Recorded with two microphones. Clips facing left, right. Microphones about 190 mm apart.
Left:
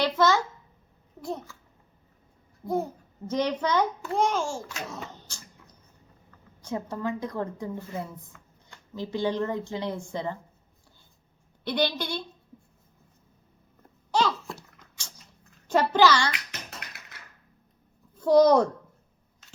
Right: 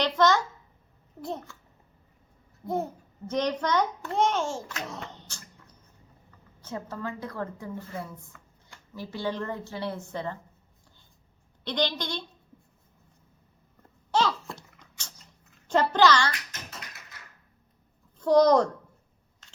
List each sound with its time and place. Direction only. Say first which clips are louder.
0.0 s a child's voice: even; 5° left (ahead or behind)
2.6 s a child's voice: left 2 dB; centre (ahead or behind)
3.2 s a child's voice: left 1 dB; 10° left (ahead or behind)
4.7 s a sound: even; 5° left (ahead or behind)
6.6 s a woman's voice: left 4 dB; 15° left (ahead or behind)
8.3 s shuffling cards: even; centre (ahead or behind)
9.0 s a woman's voice: left 4 dB; 15° left (ahead or behind)
11.6 s a woman's voice: left 2 dB; 10° left (ahead or behind)
14.1 s a sound: even; centre (ahead or behind)
15.7 s a woman's voice: left 1 dB; 10° left (ahead or behind)
18.2 s a child's voice: left 1 dB; 10° left (ahead or behind)